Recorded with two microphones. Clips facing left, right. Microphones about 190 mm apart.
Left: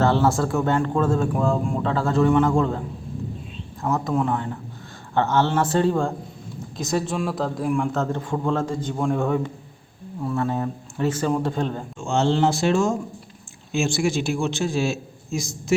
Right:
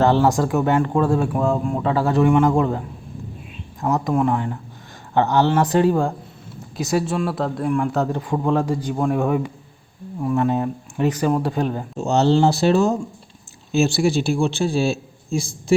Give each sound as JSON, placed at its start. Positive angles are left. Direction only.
{"t": 0.0, "sound": "speech", "side_deg": -15}
{"t": 7.9, "sound": "speech", "side_deg": -10}
{"t": 11.9, "sound": "a man's voice", "side_deg": -40}